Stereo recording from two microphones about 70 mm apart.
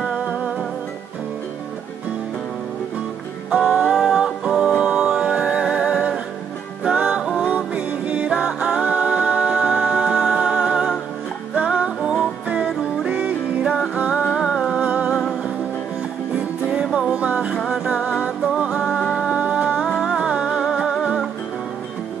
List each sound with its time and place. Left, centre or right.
0.0 s music: centre
3.4 s music: centre
16.3 s music: centre
16.8 s music: centre
19.2 s music: centre